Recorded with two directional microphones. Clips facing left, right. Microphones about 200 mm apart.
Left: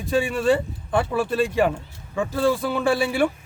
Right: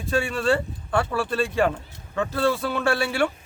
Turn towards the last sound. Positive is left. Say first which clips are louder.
# left 2 dB
turn(degrees=15)  # may be behind; listen again after turning